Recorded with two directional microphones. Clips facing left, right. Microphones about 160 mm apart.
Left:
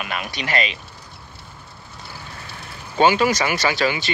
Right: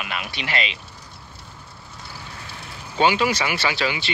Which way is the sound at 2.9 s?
45° left (ahead or behind).